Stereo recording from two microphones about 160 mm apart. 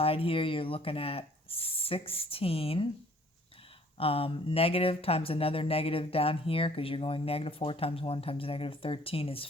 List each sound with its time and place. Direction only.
0.0 s speech: 35° left (ahead or behind)
3.9 s speech: 35° left (ahead or behind)